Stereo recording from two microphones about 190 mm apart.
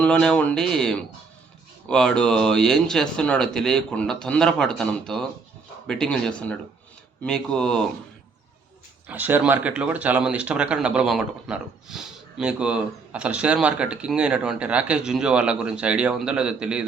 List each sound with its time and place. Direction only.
0.0 s speech: 5° left (ahead or behind)
9.0 s speech: 10° right (ahead or behind)